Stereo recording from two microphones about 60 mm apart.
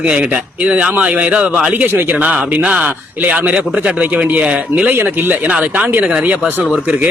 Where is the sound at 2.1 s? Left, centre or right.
Centre.